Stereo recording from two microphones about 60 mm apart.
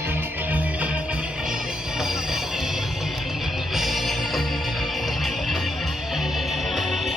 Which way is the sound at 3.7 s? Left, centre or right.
Centre.